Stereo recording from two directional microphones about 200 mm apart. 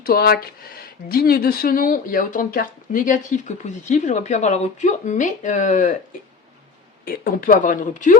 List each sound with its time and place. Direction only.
0.0 s speech: 50° left (ahead or behind)
7.0 s speech: 45° left (ahead or behind)